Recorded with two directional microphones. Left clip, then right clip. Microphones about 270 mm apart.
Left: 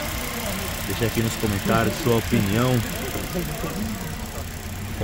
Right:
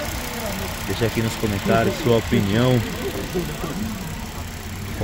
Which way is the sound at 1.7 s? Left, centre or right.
Centre.